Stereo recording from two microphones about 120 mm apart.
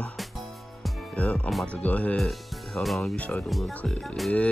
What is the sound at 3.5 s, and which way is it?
Music, centre (ahead or behind).